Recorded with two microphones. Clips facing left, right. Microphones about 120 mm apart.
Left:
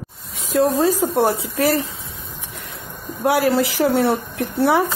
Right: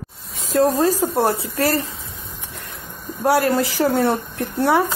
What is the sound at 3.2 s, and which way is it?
Speech, centre (ahead or behind).